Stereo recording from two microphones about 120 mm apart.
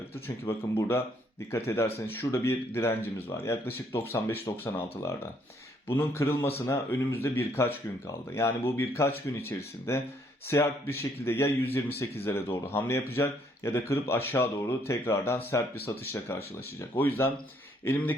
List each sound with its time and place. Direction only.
0.3 s speech: 20° left (ahead or behind)
15.9 s speech: 30° left (ahead or behind)
17.0 s speech: 15° left (ahead or behind)